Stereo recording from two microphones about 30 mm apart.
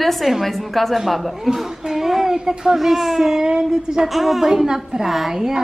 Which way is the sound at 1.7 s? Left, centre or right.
Right.